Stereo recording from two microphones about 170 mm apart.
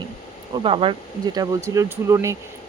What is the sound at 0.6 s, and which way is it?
Speech, 30° right (ahead or behind).